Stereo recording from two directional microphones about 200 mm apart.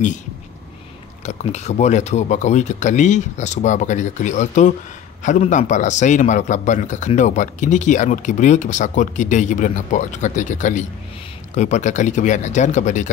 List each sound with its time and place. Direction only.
1.2 s a man's voice: 35° left (ahead or behind)